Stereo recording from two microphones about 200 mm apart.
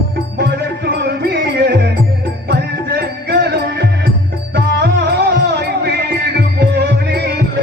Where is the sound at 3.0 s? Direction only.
55° right (ahead or behind).